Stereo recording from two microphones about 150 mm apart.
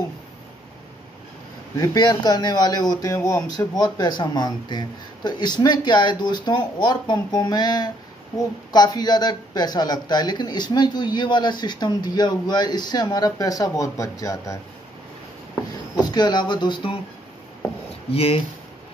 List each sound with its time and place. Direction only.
1.8 s speech: 30° left (ahead or behind)
16.0 s speech: 30° left (ahead or behind)
18.1 s speech: 40° left (ahead or behind)